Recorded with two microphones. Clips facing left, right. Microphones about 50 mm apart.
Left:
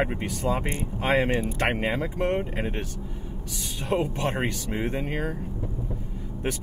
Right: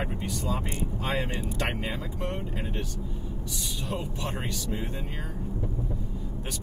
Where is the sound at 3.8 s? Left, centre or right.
Left.